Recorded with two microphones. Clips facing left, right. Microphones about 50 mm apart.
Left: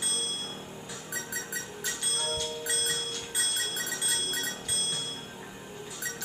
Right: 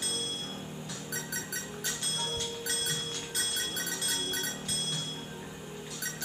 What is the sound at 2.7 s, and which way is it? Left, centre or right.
Music, centre.